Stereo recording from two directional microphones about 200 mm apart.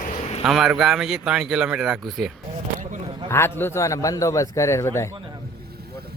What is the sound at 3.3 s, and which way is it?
Speech, 10° left (ahead or behind).